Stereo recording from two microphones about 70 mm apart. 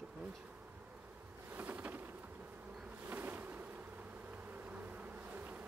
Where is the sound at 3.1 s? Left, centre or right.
Right.